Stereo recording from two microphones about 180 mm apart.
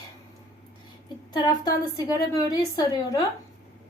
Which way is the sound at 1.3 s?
20° left (ahead or behind).